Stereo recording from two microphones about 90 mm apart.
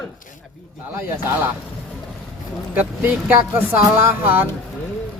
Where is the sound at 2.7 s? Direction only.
20° right (ahead or behind).